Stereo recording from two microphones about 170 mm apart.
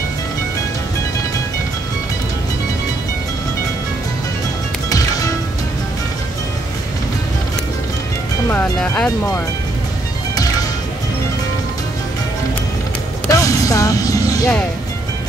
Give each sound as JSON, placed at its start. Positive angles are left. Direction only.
{"t": 8.5, "sound": "speech", "side_deg": 10}
{"t": 13.3, "sound": "speech", "side_deg": 20}